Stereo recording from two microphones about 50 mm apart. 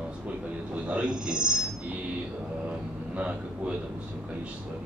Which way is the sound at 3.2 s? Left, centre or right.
Right.